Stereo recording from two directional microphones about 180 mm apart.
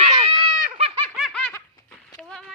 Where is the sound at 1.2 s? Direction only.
5° left (ahead or behind).